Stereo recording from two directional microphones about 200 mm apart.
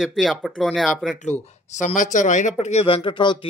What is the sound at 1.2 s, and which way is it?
A man's voice, 35° left (ahead or behind).